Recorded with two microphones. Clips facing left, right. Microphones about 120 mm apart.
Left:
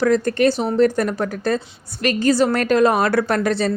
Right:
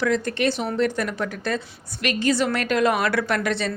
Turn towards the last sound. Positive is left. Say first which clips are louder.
# left 5 dB
turn(degrees=40)  # may be behind; listen again after turning